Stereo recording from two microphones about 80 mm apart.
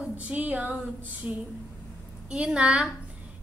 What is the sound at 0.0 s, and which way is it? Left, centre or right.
A woman's voice, centre.